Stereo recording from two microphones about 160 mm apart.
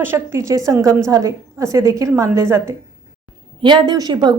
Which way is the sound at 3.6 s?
30° right (ahead or behind).